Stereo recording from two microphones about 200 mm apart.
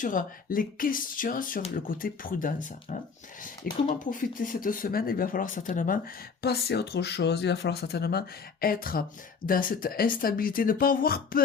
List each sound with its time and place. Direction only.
0.0 s speech: 40° left (ahead or behind)
6.4 s speech: 50° left (ahead or behind)